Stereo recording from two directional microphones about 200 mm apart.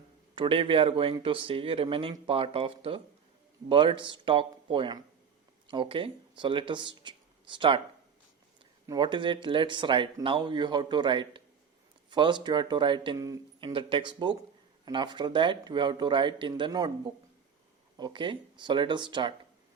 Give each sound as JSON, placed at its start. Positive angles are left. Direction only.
{"t": 0.3, "sound": "speech", "side_deg": -25}
{"t": 8.9, "sound": "speech", "side_deg": -25}
{"t": 17.9, "sound": "speech", "side_deg": -25}